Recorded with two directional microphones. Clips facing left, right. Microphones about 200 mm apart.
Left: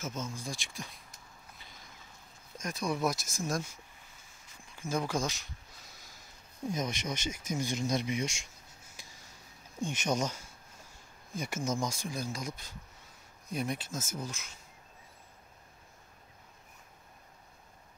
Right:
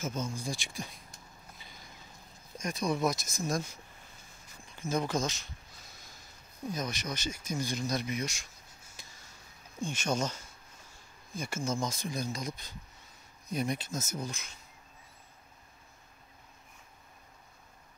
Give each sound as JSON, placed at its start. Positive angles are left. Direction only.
{"t": 0.0, "sound": "speech", "side_deg": 0}
{"t": 2.6, "sound": "speech", "side_deg": 5}
{"t": 4.7, "sound": "speech", "side_deg": 10}
{"t": 6.7, "sound": "speech", "side_deg": 25}
{"t": 9.0, "sound": "a sound", "side_deg": 10}
{"t": 9.8, "sound": "speech", "side_deg": 20}